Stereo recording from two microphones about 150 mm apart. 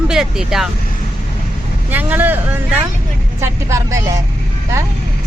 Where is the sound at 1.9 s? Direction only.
10° right (ahead or behind).